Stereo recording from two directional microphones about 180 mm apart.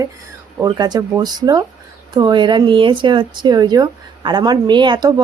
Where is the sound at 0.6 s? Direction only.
20° right (ahead or behind).